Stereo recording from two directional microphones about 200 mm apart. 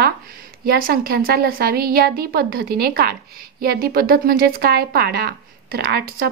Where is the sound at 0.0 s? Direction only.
50° right (ahead or behind).